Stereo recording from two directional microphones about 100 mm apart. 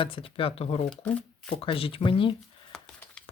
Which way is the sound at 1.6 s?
65° left (ahead or behind).